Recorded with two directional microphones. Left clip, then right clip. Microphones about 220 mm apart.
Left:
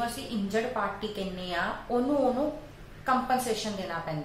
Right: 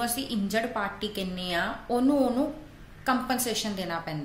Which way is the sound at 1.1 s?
55° right (ahead or behind).